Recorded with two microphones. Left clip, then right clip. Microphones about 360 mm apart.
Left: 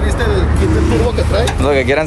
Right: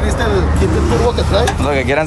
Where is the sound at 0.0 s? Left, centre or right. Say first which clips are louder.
Right 1 dB; right.